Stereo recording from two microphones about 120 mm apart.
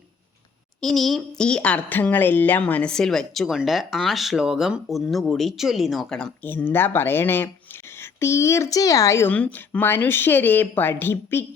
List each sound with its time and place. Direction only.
0.8 s speech: centre (ahead or behind); by 9.3 s 25° left (ahead or behind)
9.3 s speech: 15° left (ahead or behind)